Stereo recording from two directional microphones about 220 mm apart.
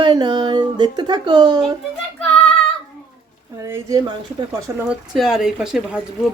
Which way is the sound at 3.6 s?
15° right (ahead or behind).